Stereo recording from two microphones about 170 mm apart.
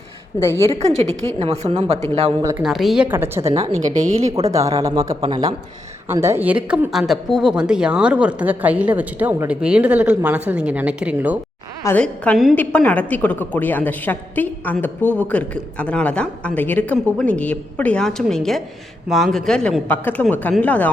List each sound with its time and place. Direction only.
0.7 s a woman's voice: 40° right (ahead or behind)
2.4 s speech: 20° right (ahead or behind)
2.6 s a woman's voice: centre (ahead or behind)
3.6 s a woman's voice: 45° right (ahead or behind)
4.5 s speech: 20° right (ahead or behind)
5.2 s a woman's voice: 30° right (ahead or behind)
6.1 s a woman's voice: 15° right (ahead or behind)
11.8 s a woman's voice: 15° left (ahead or behind)